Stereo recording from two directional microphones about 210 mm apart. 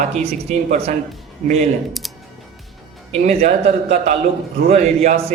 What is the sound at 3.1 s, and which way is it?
Speech, 30° right (ahead or behind).